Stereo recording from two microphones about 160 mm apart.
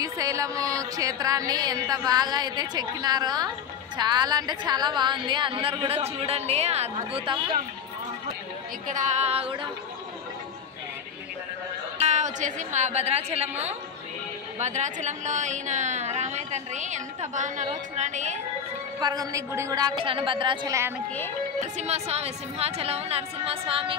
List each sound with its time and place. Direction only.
0.0 s music: 20° right (ahead or behind)
8.8 s a woman's voice: 50° right (ahead or behind); by 9.7 s 35° right (ahead or behind)
12.0 s a woman's voice: 45° right (ahead or behind)
18.9 s music: 25° right (ahead or behind)
21.5 s a woman's voice: 45° right (ahead or behind)